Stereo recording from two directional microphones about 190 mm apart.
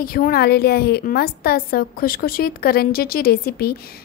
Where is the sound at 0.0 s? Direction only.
50° left (ahead or behind).